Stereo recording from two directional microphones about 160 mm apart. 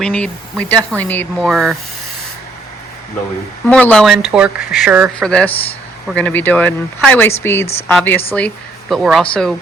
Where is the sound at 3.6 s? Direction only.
10° left (ahead or behind).